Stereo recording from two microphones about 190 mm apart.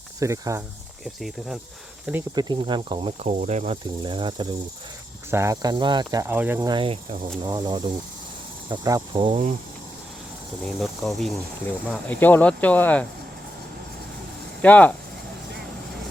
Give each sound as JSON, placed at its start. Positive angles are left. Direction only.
{"t": 0.2, "sound": "speech", "side_deg": -15}
{"t": 1.0, "sound": "speech", "side_deg": 0}
{"t": 2.3, "sound": "speech", "side_deg": -25}
{"t": 3.2, "sound": "speech", "side_deg": -35}
{"t": 4.0, "sound": "speech", "side_deg": -25}
{"t": 6.7, "sound": "speech", "side_deg": -25}
{"t": 10.6, "sound": "speech", "side_deg": 0}
{"t": 14.6, "sound": "speech", "side_deg": 10}